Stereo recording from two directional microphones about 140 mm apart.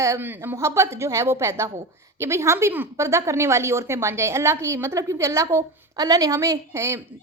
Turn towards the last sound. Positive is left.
turn(degrees=-20)  # may be behind; listen again after turning